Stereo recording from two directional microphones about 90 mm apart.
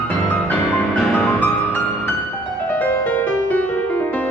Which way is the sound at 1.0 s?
5° right (ahead or behind).